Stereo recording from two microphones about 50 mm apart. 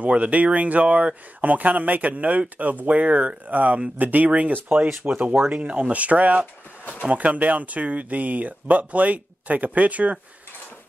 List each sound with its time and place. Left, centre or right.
0.0 s speech: right
4.7 s speech: right
5.5 s speech: right